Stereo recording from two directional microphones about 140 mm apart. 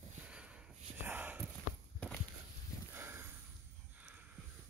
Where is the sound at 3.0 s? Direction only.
15° right (ahead or behind).